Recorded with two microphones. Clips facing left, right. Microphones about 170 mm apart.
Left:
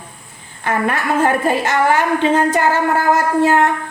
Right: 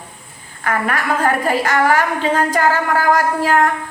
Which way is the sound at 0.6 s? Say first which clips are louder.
Left 1 dB; 25° left (ahead or behind).